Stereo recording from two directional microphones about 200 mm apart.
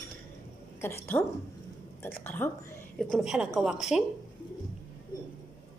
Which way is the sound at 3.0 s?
Centre (ahead or behind).